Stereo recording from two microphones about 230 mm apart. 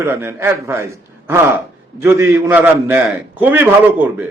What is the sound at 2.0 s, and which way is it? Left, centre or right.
A man's voice, centre.